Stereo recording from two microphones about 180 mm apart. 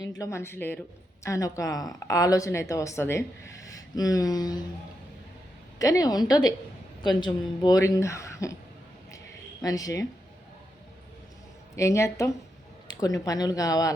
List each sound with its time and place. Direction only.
0.0 s speech: 20° left (ahead or behind)
5.8 s speech: 20° left (ahead or behind)
9.1 s a sound: 20° left (ahead or behind)
11.8 s speech: 15° left (ahead or behind)